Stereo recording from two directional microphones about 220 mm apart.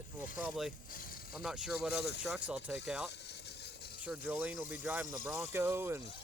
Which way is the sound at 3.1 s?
50° left (ahead or behind).